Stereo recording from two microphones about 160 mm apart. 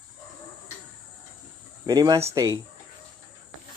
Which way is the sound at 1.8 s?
25° right (ahead or behind).